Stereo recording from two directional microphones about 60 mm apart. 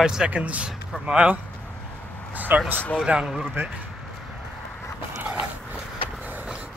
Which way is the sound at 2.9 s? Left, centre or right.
Centre.